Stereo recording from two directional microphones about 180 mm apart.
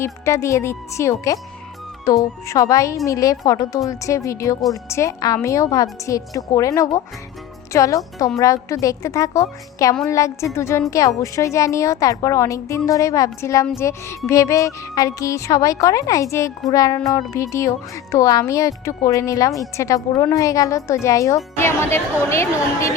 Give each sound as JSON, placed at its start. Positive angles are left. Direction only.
{"t": 0.0, "sound": "a woman's voice", "side_deg": 15}